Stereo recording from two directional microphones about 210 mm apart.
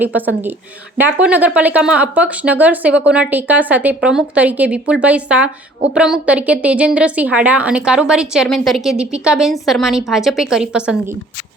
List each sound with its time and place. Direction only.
0.9 s a woman's voice: 10° right (ahead or behind)